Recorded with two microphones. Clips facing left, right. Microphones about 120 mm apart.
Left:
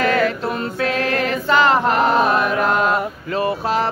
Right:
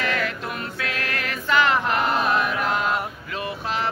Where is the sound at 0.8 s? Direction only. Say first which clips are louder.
Left 11 dB; 35° left (ahead or behind).